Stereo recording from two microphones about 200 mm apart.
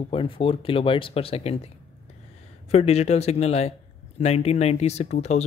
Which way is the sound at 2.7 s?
30° left (ahead or behind).